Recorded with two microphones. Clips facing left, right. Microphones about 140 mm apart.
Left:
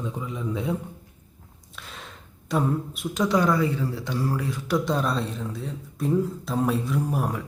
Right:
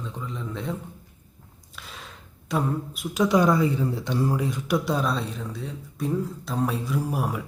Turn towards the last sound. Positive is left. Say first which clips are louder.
# left 1 dB
turn(degrees=-5)  # may be behind; listen again after turning